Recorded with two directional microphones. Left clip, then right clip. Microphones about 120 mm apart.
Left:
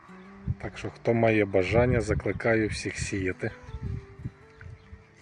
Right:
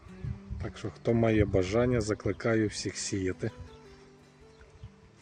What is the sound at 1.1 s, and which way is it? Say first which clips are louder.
Speech: left 4 dB; 15° right (ahead or behind).